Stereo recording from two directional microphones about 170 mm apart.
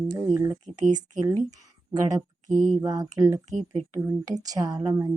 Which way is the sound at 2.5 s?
50° right (ahead or behind).